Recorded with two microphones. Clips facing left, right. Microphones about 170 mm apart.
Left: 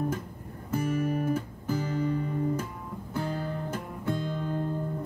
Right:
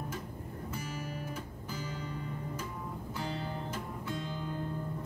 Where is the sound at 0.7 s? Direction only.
55° left (ahead or behind).